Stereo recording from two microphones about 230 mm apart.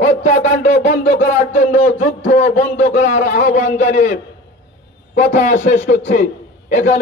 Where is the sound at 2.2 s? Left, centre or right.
Left.